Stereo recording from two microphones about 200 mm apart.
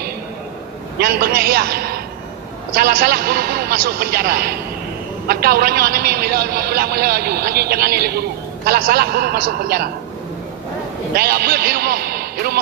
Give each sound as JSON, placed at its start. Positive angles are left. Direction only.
{"t": 0.9, "sound": "a man's voice", "side_deg": -50}
{"t": 11.1, "sound": "a man's voice", "side_deg": -50}